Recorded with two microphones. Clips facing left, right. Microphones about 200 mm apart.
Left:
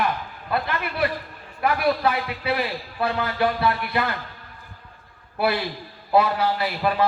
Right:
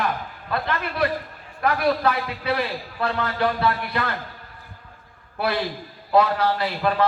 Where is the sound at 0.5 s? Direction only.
5° left (ahead or behind).